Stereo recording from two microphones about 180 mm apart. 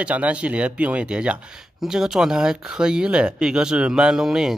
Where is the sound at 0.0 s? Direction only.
5° right (ahead or behind).